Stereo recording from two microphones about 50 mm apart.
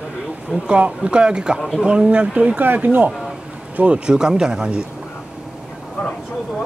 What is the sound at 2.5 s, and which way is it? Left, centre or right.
Speech, right.